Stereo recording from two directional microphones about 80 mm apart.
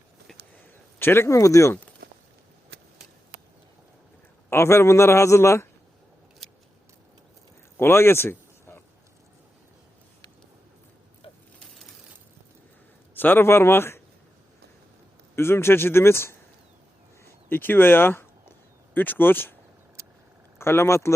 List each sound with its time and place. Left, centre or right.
0.9 s speech: left
1.3 s speech: left
4.4 s a man's voice: left
7.8 s a sound: left
13.1 s a man's voice: left
15.4 s a man's voice: left
17.5 s speech: left
20.6 s a man's voice: left